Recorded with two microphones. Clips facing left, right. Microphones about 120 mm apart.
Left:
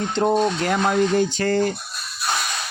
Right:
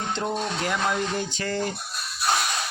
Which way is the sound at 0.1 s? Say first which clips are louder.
Left 10 dB; 45° left (ahead or behind).